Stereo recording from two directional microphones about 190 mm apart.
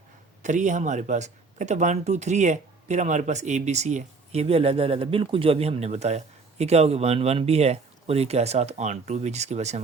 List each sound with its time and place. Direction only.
0.4 s speech: 40° right (ahead or behind)